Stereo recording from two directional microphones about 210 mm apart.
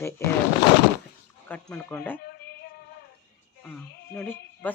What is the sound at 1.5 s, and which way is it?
Speech, 5° left (ahead or behind).